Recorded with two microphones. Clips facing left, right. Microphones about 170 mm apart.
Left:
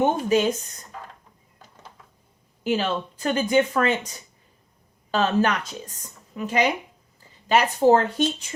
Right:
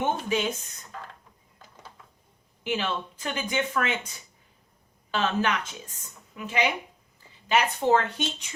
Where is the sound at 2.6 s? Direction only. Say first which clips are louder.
Left 5 dB; 40° left (ahead or behind).